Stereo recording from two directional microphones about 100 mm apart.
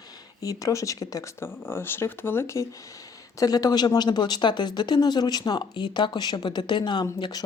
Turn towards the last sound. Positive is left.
turn(degrees=40)  # may be behind; listen again after turning